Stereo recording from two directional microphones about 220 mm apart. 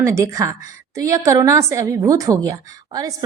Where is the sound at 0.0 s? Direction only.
15° right (ahead or behind).